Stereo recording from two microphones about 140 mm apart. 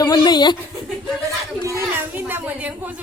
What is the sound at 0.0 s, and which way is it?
Chuckle, 30° left (ahead or behind).